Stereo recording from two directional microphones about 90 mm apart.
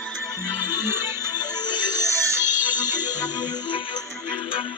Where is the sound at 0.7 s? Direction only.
25° right (ahead or behind).